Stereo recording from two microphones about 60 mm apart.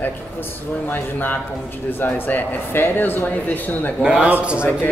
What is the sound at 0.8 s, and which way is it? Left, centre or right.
Speech, left.